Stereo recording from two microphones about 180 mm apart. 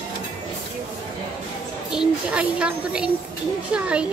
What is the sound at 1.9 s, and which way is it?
Speech, 5° right (ahead or behind).